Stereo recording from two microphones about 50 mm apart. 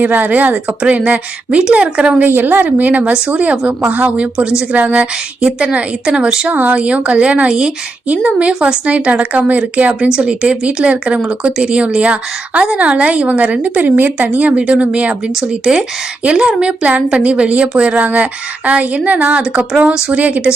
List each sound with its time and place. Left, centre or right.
0.0 s a woman's voice: right
2.2 s a woman's voice: right
5.5 s a woman's voice: centre
6.5 s a woman's voice: right
15.4 s a woman's voice: centre
20.1 s a woman's voice: right